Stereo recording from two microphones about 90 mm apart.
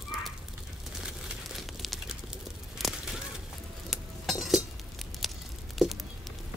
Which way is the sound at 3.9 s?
Centre (ahead or behind).